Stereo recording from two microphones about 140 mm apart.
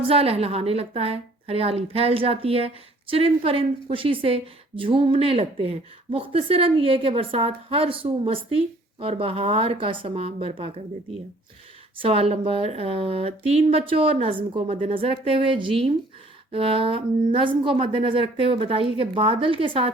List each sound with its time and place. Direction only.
0.1 s a woman's voice: 45° right (ahead or behind)
12.0 s a woman's voice: 45° right (ahead or behind)